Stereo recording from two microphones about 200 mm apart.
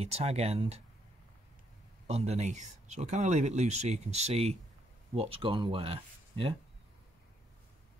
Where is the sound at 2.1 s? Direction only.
35° right (ahead or behind).